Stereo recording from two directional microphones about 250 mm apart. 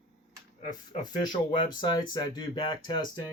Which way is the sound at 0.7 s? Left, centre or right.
Centre.